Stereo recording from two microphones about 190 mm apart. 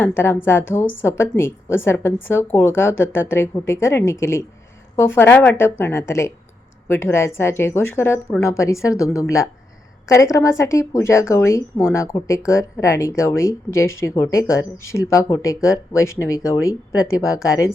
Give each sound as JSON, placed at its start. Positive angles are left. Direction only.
{"t": 0.5, "sound": "speech", "side_deg": 15}
{"t": 10.3, "sound": "speech", "side_deg": 15}